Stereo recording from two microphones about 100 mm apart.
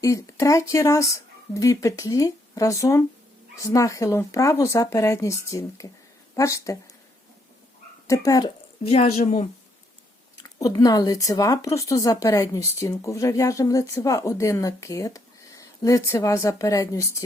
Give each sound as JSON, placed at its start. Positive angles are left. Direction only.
{"t": 0.0, "sound": "speech", "side_deg": 30}
{"t": 8.0, "sound": "speech", "side_deg": 30}
{"t": 8.4, "sound": "speech", "side_deg": 80}
{"t": 10.4, "sound": "speech", "side_deg": 35}